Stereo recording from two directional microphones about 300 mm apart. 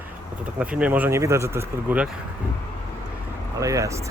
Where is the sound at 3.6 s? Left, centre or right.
Centre.